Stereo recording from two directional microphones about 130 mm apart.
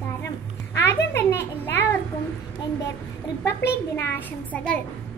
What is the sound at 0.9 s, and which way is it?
A child's voice, 15° left (ahead or behind).